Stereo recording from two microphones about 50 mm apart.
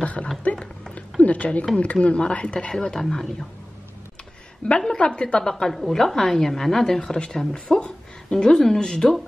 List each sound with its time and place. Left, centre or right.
0.0 s a sound: left
1.2 s a woman's voice: left; by 3.4 s centre
4.6 s a woman's voice: centre